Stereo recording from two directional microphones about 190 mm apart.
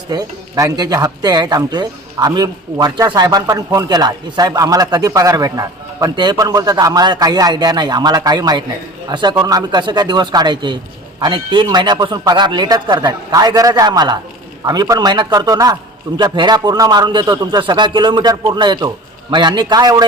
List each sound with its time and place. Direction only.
0.1 s speech: 20° right (ahead or behind)